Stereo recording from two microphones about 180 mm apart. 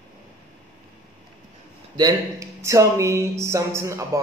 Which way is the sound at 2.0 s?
20° right (ahead or behind).